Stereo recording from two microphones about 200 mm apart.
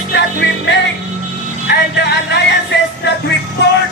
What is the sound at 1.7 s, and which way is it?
Music, 55° left (ahead or behind).